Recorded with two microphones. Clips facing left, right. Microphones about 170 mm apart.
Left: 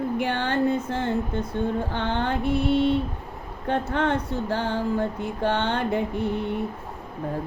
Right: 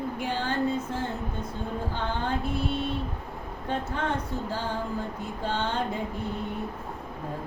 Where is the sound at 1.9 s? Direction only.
70° left (ahead or behind).